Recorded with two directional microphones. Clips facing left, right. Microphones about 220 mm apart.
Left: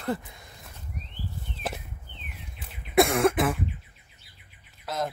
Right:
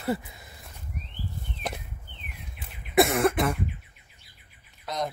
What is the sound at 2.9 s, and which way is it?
Cough, centre (ahead or behind).